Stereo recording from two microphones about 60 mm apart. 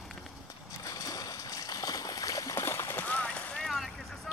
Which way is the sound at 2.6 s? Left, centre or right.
Left.